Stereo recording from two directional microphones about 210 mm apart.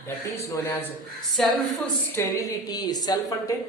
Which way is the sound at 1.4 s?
Centre (ahead or behind).